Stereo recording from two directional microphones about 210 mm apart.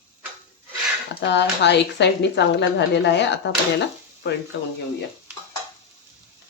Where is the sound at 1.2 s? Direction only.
55° left (ahead or behind).